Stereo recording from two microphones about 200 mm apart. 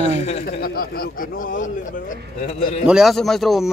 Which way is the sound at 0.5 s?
50° left (ahead or behind).